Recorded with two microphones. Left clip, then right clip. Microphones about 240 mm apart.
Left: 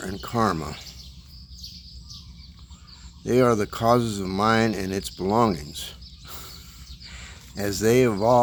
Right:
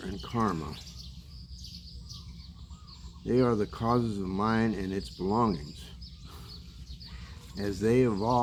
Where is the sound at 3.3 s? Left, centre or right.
Left.